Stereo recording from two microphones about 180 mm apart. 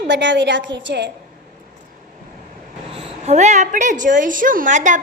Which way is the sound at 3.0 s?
40° right (ahead or behind).